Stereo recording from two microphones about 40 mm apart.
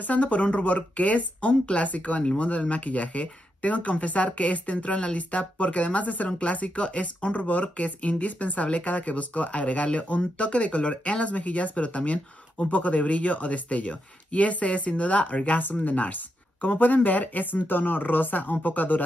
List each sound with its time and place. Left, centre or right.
0.0 s speech: left
15.6 s speech: left